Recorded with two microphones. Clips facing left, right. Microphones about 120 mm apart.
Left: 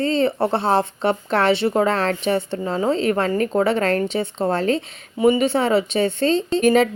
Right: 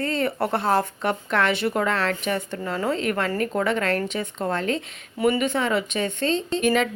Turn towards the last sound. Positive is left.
turn(degrees=35)  # may be behind; listen again after turning